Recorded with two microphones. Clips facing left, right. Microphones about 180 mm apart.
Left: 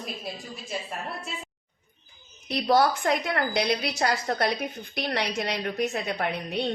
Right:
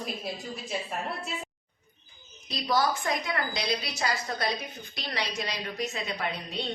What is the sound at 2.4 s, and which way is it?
A woman's voice, 60° left (ahead or behind).